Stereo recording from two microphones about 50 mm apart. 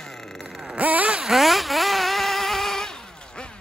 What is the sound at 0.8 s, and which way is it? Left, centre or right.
Vehicle, right.